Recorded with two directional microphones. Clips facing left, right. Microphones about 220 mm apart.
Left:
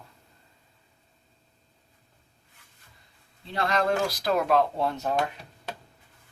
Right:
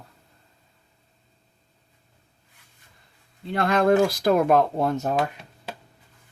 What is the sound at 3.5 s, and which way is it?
Speech, 55° right (ahead or behind).